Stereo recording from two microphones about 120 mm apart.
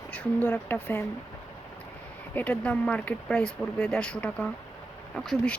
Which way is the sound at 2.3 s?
15° left (ahead or behind).